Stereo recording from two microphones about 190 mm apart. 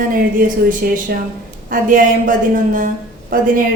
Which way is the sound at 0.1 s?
45° right (ahead or behind).